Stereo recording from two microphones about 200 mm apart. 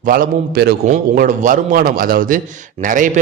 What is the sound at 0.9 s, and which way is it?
A man's voice, 40° right (ahead or behind).